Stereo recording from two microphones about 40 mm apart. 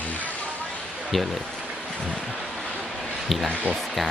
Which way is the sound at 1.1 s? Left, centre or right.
Centre.